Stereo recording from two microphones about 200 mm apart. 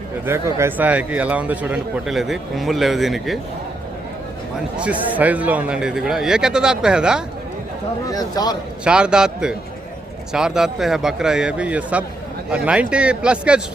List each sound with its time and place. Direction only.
0.3 s speech: 15° right (ahead or behind)
4.8 s speech: 5° right (ahead or behind)
8.1 s speech: 20° left (ahead or behind)
8.8 s speech: 5° right (ahead or behind)